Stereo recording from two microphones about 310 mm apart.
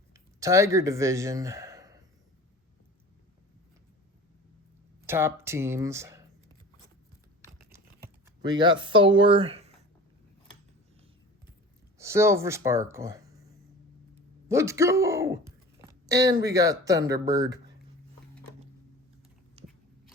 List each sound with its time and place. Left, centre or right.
0.1 s speech: centre
5.0 s speech: centre
8.4 s speech: centre
11.9 s speech: centre
14.4 s speech: centre
19.6 s biting: centre